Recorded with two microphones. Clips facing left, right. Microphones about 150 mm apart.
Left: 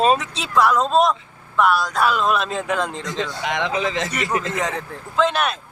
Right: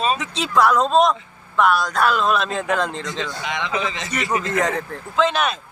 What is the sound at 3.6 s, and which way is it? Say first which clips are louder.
Speech: left 4 dB; 50° left (ahead or behind).